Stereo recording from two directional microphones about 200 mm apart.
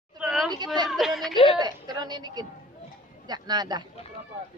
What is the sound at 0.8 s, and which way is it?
Speech, centre (ahead or behind).